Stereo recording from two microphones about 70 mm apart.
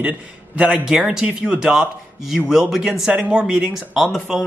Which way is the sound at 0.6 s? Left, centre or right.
Centre.